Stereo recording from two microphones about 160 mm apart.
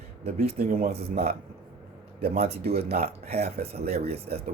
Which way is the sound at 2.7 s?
70° right (ahead or behind).